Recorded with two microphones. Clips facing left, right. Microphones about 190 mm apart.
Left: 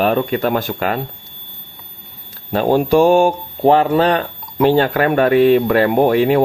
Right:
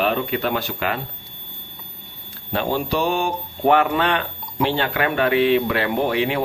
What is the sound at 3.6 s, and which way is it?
Speech, 30° left (ahead or behind).